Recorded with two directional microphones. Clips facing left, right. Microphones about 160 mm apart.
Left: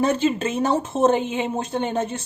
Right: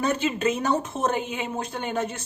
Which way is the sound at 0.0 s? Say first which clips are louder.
Left 4 dB; 30° left (ahead or behind).